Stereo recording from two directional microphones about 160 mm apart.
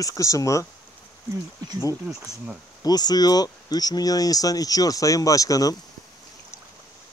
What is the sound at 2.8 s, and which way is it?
Speech, 25° left (ahead or behind).